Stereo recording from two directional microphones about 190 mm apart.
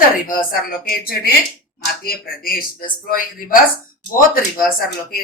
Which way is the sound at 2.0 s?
50° left (ahead or behind).